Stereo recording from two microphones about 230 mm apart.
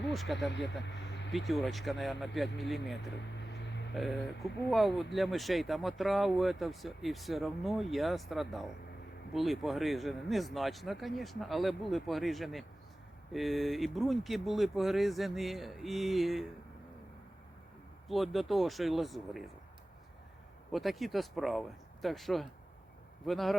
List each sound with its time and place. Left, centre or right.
0.1 s speech: centre
3.4 s a sound: left
3.9 s speech: centre
18.1 s speech: centre
20.7 s speech: centre